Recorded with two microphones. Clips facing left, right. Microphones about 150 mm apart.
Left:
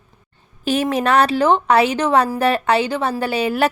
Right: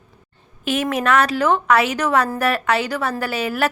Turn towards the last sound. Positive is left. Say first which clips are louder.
# left 3 dB
turn(degrees=30)  # may be behind; listen again after turning